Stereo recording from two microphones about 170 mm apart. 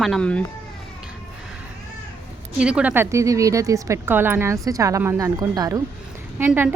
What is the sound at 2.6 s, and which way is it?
A woman's voice, 5° right (ahead or behind).